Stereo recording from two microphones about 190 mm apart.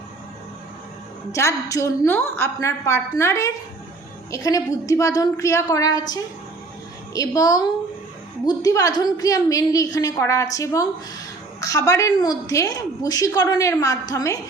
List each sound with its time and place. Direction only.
1.3 s a woman's voice: 15° left (ahead or behind)